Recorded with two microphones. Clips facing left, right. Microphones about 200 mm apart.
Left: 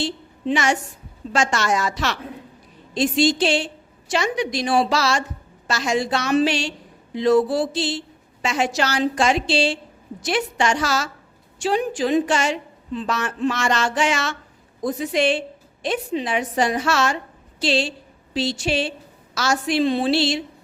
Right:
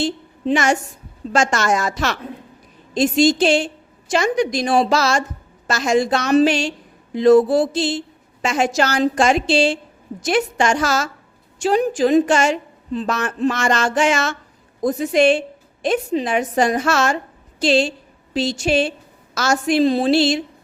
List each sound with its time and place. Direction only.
0.0 s a woman's voice: 45° right (ahead or behind)